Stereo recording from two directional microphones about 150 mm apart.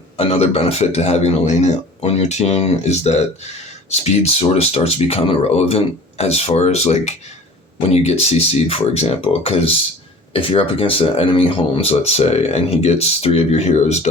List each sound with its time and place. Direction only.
0.2 s speech: 45° left (ahead or behind)